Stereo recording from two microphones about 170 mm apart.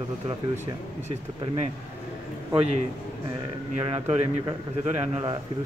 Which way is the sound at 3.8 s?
35° right (ahead or behind).